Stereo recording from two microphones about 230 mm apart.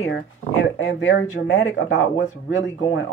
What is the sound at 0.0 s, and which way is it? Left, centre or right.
Speech, left.